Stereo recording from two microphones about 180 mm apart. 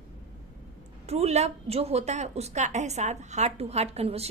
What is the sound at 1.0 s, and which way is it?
A woman's voice, 35° right (ahead or behind).